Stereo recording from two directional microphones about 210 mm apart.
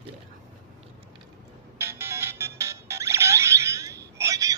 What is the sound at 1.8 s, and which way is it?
Music, 10° right (ahead or behind).